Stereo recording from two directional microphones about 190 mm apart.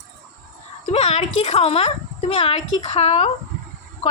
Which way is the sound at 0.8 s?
35° left (ahead or behind).